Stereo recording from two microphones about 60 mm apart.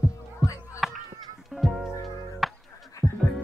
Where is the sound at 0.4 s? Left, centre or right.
Centre.